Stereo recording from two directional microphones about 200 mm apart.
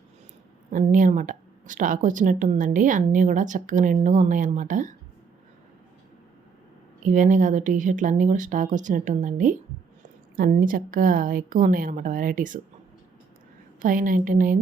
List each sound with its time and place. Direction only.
0.7 s a woman's voice: 40° right (ahead or behind)
7.0 s a woman's voice: 40° right (ahead or behind)
13.8 s a woman's voice: 40° right (ahead or behind)